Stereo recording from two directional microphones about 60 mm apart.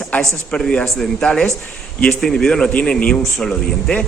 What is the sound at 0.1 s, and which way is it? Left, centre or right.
Speech, left.